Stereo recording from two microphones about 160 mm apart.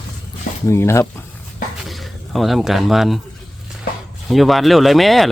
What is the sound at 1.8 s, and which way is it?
Speech, centre (ahead or behind).